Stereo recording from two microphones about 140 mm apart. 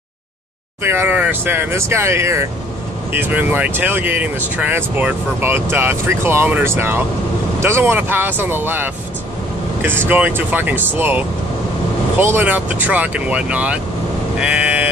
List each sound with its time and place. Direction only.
0.8 s speech: 15° right (ahead or behind)
14.4 s sheep: 10° right (ahead or behind)